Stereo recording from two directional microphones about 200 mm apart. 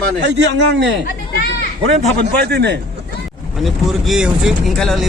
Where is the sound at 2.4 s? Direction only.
55° right (ahead or behind).